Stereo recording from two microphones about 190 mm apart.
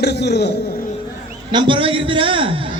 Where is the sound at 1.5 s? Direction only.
25° right (ahead or behind).